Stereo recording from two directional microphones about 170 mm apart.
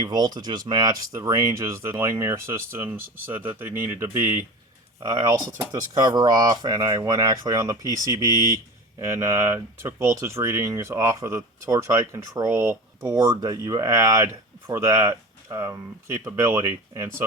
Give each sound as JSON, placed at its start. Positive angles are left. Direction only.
{"t": 0.0, "sound": "speech", "side_deg": -25}